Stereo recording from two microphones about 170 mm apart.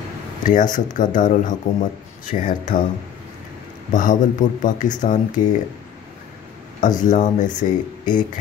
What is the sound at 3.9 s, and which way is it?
Speech, 50° left (ahead or behind).